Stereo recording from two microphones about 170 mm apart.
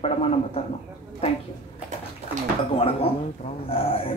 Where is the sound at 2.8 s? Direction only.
35° left (ahead or behind).